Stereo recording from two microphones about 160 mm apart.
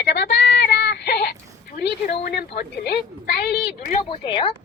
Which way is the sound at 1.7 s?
90° left.